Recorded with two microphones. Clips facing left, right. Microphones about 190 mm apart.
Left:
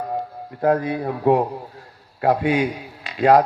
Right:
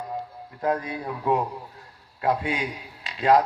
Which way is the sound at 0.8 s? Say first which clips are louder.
Left 8 dB; 35° left (ahead or behind).